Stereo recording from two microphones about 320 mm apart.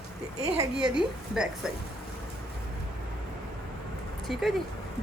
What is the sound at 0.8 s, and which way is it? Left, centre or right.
Speech, centre.